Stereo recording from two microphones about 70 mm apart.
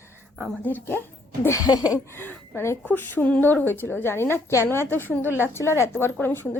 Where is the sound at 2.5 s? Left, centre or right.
Left.